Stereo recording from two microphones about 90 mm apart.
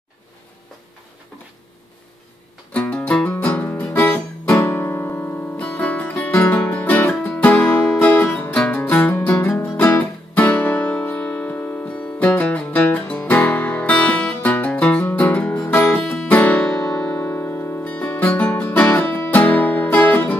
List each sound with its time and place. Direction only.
2.7 s music: 15° left (ahead or behind)
4.6 s music: 25° left (ahead or behind)
5.6 s music: 15° left (ahead or behind)